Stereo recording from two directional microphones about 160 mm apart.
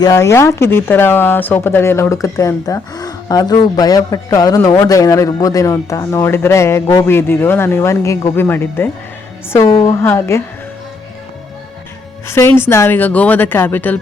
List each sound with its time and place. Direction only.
0.0 s speech: 20° left (ahead or behind)
12.3 s speech: 15° left (ahead or behind)